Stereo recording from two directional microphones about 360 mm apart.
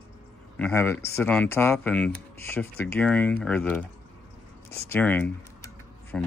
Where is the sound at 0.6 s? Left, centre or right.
Centre.